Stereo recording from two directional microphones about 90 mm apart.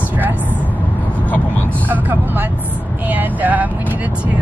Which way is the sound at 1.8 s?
20° right (ahead or behind).